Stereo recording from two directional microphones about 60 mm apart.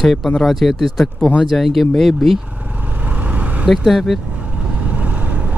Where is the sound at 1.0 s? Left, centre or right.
Centre.